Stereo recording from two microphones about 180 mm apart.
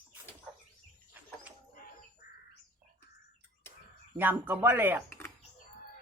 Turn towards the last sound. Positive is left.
turn(degrees=-10)  # may be behind; listen again after turning